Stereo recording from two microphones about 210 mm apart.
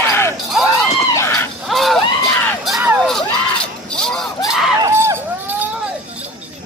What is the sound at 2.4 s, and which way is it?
Music, centre (ahead or behind).